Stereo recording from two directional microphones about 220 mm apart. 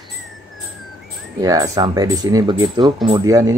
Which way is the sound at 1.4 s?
15° right (ahead or behind).